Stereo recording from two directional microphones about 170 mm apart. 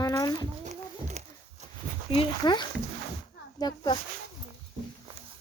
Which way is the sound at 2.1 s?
25° left (ahead or behind).